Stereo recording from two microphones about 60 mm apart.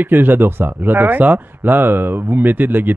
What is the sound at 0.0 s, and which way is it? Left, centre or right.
Speech, right.